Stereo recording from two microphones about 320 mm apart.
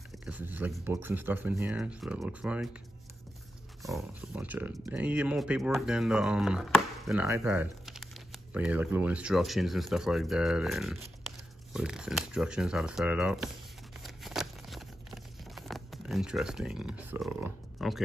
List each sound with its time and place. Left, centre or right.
0.2 s speech: centre
3.8 s speech: centre
14.0 s a sound: centre